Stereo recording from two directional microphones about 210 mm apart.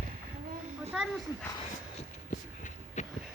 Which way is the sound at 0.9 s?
5° right (ahead or behind).